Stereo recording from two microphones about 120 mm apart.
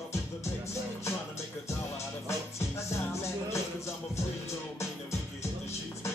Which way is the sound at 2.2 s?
25° left (ahead or behind).